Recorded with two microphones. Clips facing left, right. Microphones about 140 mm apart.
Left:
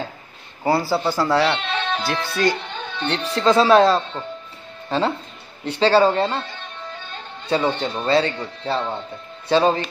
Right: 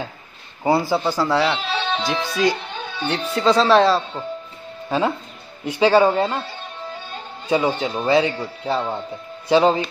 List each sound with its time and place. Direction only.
0.7 s speech: 20° right (ahead or behind)
1.0 s speech: 10° right (ahead or behind)
3.5 s a man's voice: 5° left (ahead or behind); by 9.8 s 15° right (ahead or behind)